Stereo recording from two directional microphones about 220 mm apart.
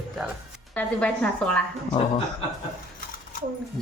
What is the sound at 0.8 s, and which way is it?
Speech, 5° left (ahead or behind).